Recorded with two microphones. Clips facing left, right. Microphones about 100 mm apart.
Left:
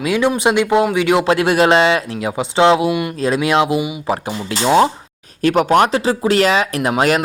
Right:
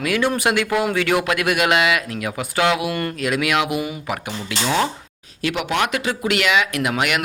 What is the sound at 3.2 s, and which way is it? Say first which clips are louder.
Speech: left 5 dB; 30° left (ahead or behind).